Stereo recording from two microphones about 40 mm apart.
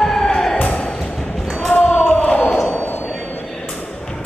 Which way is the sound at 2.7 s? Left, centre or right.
Left.